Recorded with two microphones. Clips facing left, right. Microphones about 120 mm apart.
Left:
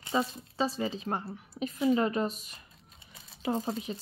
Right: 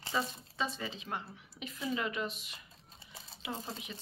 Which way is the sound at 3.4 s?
40° left (ahead or behind).